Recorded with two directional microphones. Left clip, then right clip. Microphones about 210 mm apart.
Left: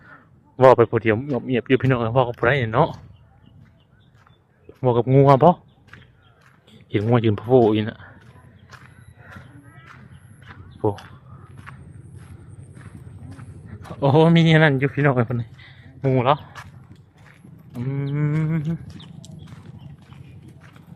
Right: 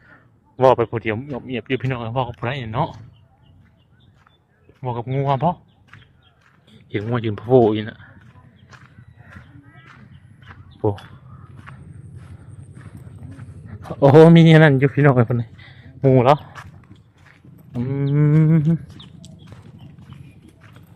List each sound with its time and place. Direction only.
0.1 s a man's voice: 10° left (ahead or behind); by 2.9 s 30° left (ahead or behind)
4.8 s speech: 35° left (ahead or behind)
6.7 s speech: 10° left (ahead or behind)
7.4 s speech: centre (ahead or behind)
7.8 s speech: 10° left (ahead or behind)
8.7 s horse: centre (ahead or behind)
10.8 s a sound: centre (ahead or behind)
13.7 s a man's voice: 25° right (ahead or behind)
17.7 s humming: 20° right (ahead or behind)
19.0 s horse: 10° right (ahead or behind)